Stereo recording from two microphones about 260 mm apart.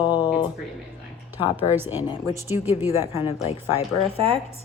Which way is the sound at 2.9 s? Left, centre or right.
Left.